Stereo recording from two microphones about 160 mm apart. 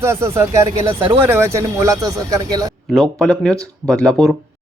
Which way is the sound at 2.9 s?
Centre (ahead or behind).